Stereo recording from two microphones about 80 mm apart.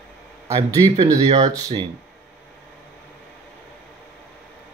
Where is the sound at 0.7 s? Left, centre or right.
Right.